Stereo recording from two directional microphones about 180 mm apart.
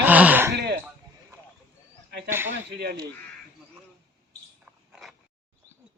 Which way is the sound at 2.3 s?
10° right (ahead or behind).